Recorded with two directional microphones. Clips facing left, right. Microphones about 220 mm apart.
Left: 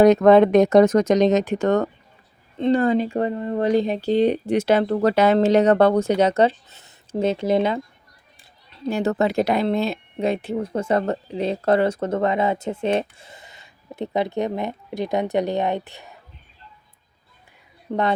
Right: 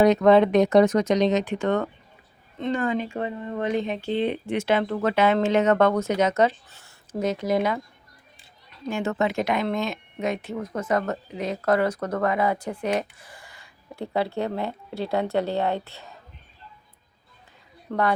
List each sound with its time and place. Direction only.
0.0 s speech: 45° left (ahead or behind); by 7.8 s 25° left (ahead or behind)
8.9 s speech: 35° left (ahead or behind); by 16.1 s 15° left (ahead or behind)
17.9 s speech: 15° left (ahead or behind)